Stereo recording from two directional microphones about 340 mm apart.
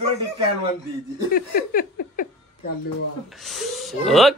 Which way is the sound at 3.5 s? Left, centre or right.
Centre.